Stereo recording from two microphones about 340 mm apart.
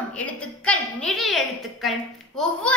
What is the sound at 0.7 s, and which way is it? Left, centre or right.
A woman's voice, centre.